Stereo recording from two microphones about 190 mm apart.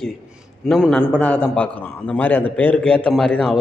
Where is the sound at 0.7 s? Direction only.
Centre (ahead or behind).